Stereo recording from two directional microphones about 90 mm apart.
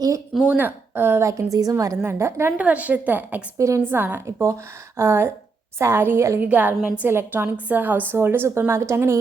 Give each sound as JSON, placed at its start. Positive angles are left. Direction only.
{"t": 0.5, "sound": "a woman's voice", "side_deg": -20}
{"t": 2.6, "sound": "a woman's voice", "side_deg": -15}
{"t": 3.6, "sound": "a woman's voice", "side_deg": -35}
{"t": 3.8, "sound": "a woman's voice", "side_deg": -25}
{"t": 6.4, "sound": "a woman's voice", "side_deg": -20}